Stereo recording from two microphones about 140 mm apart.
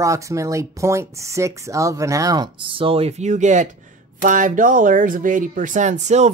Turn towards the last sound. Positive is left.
turn(degrees=-55)  # may be behind; listen again after turning